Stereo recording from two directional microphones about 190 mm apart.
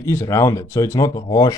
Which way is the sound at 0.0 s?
15° left (ahead or behind).